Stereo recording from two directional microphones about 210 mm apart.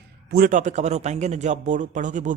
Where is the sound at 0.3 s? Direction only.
45° right (ahead or behind).